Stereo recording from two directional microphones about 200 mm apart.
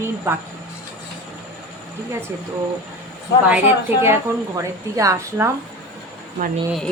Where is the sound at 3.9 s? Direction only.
10° right (ahead or behind).